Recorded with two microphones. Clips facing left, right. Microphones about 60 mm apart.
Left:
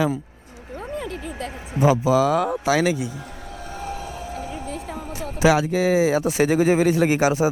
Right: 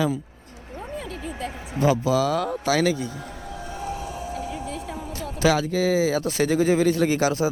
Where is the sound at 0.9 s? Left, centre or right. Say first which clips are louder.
Left 3 dB; left.